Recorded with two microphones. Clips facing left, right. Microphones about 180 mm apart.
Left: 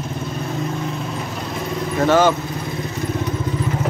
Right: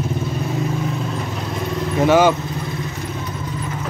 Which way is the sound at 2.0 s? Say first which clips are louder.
Right 1 dB; 10° right (ahead or behind).